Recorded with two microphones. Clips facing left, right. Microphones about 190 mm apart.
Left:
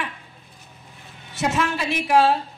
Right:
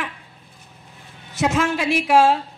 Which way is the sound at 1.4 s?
80° right.